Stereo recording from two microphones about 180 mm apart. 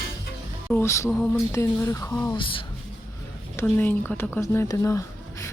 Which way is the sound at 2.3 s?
30° left (ahead or behind).